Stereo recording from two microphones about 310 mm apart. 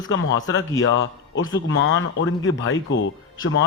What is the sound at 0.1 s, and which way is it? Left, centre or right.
A man's voice, left.